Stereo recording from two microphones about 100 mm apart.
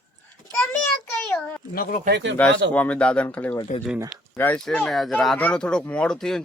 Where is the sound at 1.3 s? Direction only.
15° left (ahead or behind).